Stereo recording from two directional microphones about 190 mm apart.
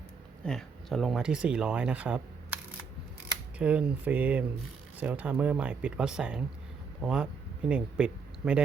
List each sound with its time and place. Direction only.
0.4 s speech: centre (ahead or behind)
3.6 s speech: 5° right (ahead or behind)